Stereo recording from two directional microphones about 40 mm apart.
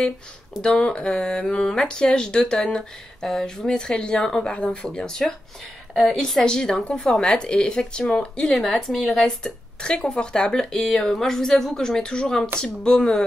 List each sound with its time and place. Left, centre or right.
0.6 s speech: left
8.9 s speech: centre
9.2 s speech: centre